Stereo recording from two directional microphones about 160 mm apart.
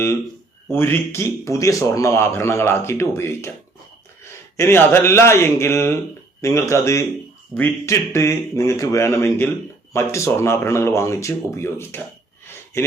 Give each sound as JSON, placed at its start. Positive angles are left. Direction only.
{"t": 0.7, "sound": "speech", "side_deg": 15}